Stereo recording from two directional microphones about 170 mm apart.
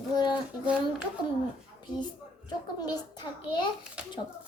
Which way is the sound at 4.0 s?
5° right (ahead or behind).